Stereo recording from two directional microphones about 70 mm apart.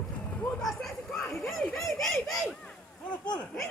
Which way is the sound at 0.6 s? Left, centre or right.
Centre.